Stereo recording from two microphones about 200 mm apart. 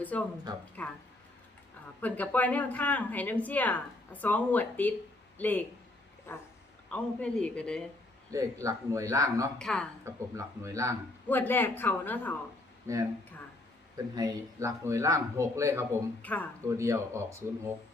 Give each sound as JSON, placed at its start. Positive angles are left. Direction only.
{"t": 0.1, "sound": "speech", "side_deg": 5}
{"t": 2.0, "sound": "speech", "side_deg": 10}
{"t": 8.3, "sound": "a man's voice", "side_deg": -15}
{"t": 9.6, "sound": "speech", "side_deg": 5}
{"t": 10.0, "sound": "a man's voice", "side_deg": -15}
{"t": 11.3, "sound": "speech", "side_deg": 10}
{"t": 12.9, "sound": "a man's voice", "side_deg": -10}
{"t": 16.2, "sound": "speech", "side_deg": 10}
{"t": 16.6, "sound": "a man's voice", "side_deg": -15}